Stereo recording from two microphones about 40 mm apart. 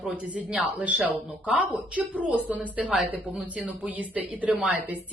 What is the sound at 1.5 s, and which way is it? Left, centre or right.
A woman's voice, right.